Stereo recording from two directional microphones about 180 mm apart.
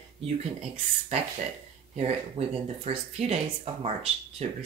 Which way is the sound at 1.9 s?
35° right (ahead or behind).